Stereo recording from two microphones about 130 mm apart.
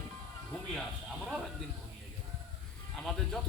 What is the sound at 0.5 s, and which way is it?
Music, 5° left (ahead or behind).